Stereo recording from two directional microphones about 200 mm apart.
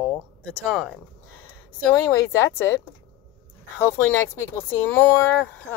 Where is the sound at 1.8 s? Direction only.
15° left (ahead or behind).